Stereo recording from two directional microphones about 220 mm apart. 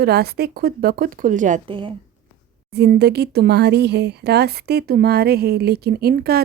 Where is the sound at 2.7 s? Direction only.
50° right (ahead or behind).